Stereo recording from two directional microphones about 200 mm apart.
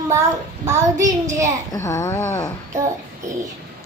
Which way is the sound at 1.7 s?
15° left (ahead or behind).